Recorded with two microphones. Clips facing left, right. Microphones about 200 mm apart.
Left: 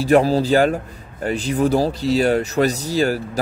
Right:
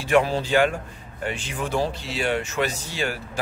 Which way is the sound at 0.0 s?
35° left (ahead or behind).